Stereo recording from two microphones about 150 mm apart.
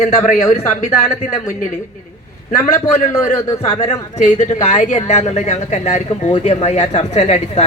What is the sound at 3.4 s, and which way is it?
Speech, 15° left (ahead or behind).